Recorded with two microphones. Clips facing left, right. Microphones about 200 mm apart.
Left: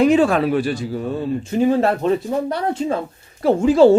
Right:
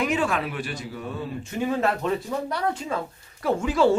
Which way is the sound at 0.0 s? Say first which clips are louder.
Left 10 dB; 30° left (ahead or behind).